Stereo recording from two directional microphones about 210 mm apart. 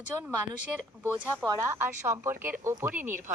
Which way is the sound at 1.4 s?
15° right (ahead or behind).